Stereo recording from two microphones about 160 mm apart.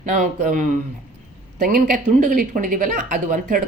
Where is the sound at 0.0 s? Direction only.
50° right (ahead or behind).